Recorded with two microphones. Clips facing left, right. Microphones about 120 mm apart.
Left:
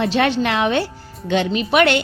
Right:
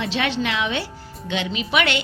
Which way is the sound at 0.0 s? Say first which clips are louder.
Left 6 dB; 45° left (ahead or behind).